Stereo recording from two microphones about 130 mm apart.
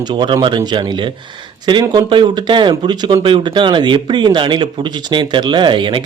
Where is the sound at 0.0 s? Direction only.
40° right (ahead or behind).